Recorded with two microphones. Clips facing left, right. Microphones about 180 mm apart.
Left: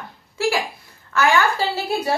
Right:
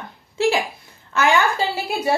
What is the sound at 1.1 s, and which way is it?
A woman's voice, 20° right (ahead or behind).